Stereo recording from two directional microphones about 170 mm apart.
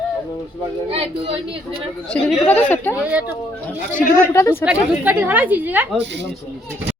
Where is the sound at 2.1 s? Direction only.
10° left (ahead or behind).